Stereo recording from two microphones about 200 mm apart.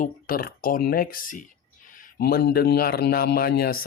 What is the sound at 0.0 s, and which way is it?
Speech, 45° left (ahead or behind).